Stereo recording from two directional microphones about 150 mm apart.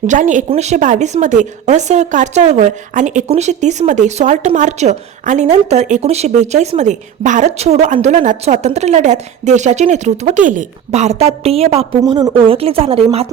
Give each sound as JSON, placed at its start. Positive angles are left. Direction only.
{"t": 0.1, "sound": "a woman's voice", "side_deg": -55}